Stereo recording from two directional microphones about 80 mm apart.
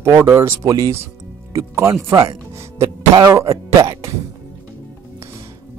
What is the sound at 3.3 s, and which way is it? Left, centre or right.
Speech, right.